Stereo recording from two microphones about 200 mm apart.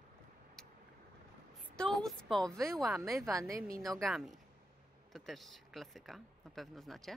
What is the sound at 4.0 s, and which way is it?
Speech, centre (ahead or behind).